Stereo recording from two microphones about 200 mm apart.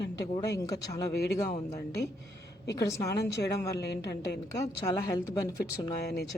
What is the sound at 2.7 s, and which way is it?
Speech, 15° left (ahead or behind).